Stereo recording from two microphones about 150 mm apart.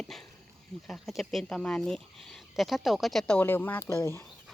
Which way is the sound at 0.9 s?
Centre (ahead or behind).